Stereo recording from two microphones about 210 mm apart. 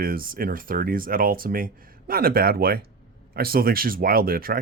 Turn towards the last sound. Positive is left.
turn(degrees=-45)  # may be behind; listen again after turning